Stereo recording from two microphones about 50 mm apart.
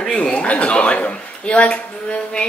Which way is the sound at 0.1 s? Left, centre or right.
Left.